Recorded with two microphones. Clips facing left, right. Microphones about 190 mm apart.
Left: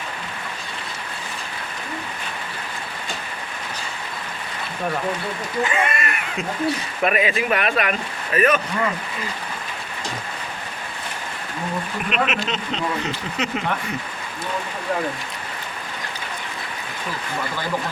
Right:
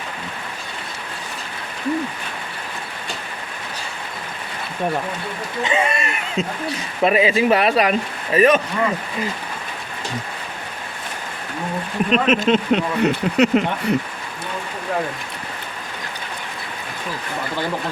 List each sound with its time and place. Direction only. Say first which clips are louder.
5.6 s speech: right 4 dB; 25° right (ahead or behind)
12.1 s speech: right 6 dB; 35° right (ahead or behind)
12.5 s speech: right 8 dB; 60° right (ahead or behind)